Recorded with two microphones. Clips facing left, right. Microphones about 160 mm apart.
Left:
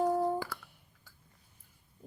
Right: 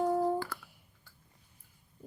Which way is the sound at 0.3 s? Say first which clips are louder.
Right 1 dB; 10° left (ahead or behind).